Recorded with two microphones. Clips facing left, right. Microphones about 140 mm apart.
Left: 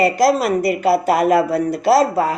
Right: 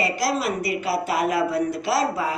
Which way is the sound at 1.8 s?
45° left (ahead or behind).